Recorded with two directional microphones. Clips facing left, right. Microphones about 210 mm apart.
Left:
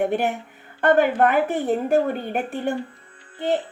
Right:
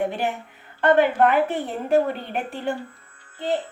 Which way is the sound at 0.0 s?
55° left (ahead or behind).